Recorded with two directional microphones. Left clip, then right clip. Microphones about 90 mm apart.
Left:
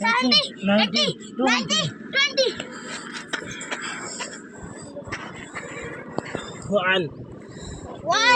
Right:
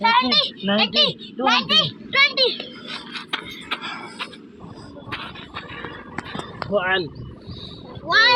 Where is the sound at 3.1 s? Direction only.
35° left (ahead or behind).